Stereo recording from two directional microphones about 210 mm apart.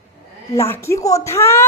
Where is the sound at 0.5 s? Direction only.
10° left (ahead or behind).